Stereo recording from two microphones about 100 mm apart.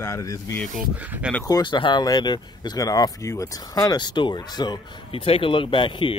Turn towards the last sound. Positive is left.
turn(degrees=55)  # may be behind; listen again after turning